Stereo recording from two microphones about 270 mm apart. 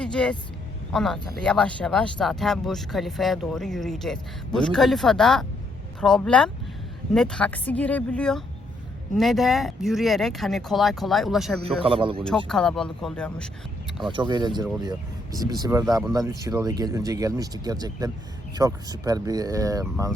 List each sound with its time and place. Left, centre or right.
0.0 s speech: centre
11.8 s speech: centre
12.5 s speech: centre
14.0 s speech: centre